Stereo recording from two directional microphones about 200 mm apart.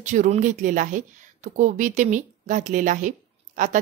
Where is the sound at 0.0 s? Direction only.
35° right (ahead or behind).